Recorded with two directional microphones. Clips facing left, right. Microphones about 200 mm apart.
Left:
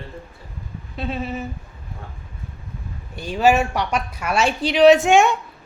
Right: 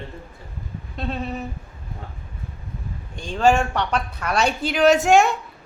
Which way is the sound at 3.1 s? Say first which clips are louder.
Left 1 dB; 5° left (ahead or behind).